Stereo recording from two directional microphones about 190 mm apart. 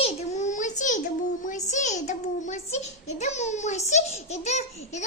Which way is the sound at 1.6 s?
40° left (ahead or behind).